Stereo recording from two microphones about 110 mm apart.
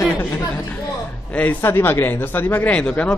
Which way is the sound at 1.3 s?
15° left (ahead or behind).